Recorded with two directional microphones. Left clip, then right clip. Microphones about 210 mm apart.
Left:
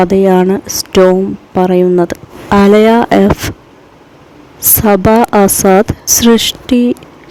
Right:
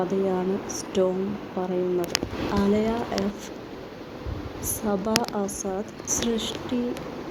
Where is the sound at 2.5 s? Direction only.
55° left (ahead or behind).